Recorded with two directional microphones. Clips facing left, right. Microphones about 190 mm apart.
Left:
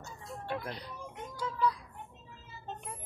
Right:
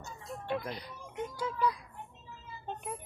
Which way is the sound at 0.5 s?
15° right (ahead or behind).